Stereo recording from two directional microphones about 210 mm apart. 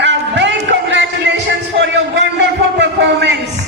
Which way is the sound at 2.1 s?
55° right (ahead or behind).